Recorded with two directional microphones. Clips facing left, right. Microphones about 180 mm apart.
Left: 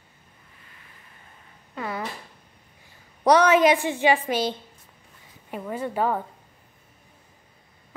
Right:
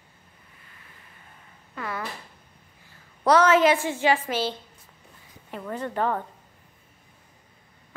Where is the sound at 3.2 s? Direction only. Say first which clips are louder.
Left 1 dB; 15° left (ahead or behind).